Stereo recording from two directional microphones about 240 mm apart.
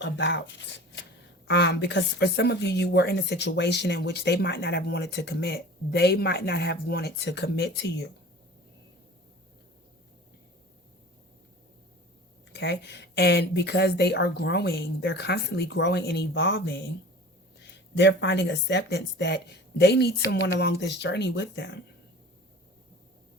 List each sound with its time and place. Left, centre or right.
0.0 s speech: left
12.5 s speech: left